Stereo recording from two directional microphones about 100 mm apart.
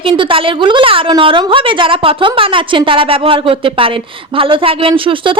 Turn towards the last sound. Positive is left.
turn(degrees=-60)  # may be behind; listen again after turning